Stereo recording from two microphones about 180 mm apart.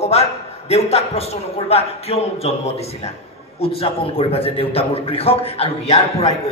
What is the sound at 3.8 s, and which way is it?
A man's voice, 35° left (ahead or behind).